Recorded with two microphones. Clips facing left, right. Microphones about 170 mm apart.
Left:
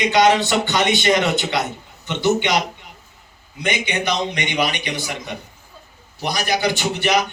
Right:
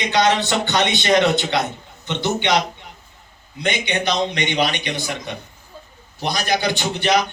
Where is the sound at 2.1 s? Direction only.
10° left (ahead or behind).